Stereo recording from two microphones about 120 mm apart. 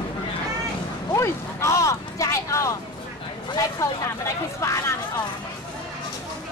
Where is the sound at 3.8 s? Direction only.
25° left (ahead or behind).